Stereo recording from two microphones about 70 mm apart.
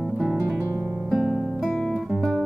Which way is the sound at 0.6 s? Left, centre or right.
Right.